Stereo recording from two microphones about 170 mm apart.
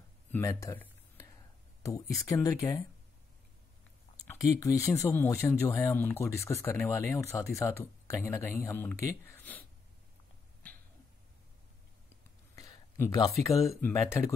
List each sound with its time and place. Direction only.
0.3 s a sound: 15° left (ahead or behind)
2.2 s speech: 20° left (ahead or behind)
4.2 s speech: 20° left (ahead or behind)
12.9 s speech: 20° left (ahead or behind)
13.5 s speech: centre (ahead or behind)
13.7 s speech: 15° left (ahead or behind)